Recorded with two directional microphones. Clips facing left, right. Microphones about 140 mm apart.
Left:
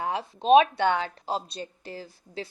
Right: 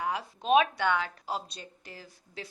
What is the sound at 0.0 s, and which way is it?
A woman's voice, 25° left (ahead or behind).